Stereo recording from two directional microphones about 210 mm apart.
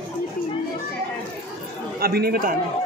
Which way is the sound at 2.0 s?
45° right (ahead or behind).